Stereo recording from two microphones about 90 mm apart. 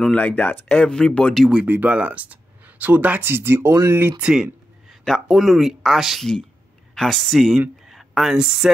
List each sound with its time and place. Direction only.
0.1 s speech: 15° left (ahead or behind)
1.5 s speech: 15° right (ahead or behind)
4.2 s speech: 5° right (ahead or behind)